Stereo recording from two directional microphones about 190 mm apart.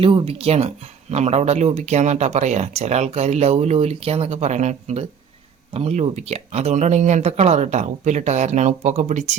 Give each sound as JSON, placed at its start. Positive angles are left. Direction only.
{"t": 0.0, "sound": "speech", "side_deg": -25}